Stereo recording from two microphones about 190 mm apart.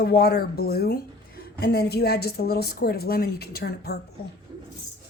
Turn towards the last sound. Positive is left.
turn(degrees=55)  # may be behind; listen again after turning